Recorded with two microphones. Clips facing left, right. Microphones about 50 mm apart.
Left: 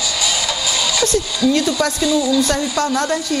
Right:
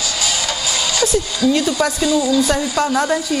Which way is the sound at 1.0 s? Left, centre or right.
Centre.